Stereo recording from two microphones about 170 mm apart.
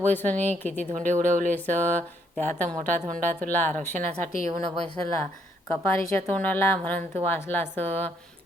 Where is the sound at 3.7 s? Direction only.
50° right (ahead or behind).